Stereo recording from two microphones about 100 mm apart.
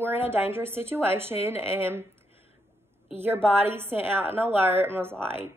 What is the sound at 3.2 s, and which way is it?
A woman's voice, 20° right (ahead or behind).